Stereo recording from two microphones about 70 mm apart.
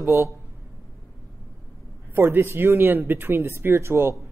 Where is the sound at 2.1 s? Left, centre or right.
Right.